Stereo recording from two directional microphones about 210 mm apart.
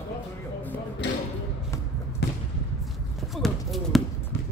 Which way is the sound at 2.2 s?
55° left (ahead or behind).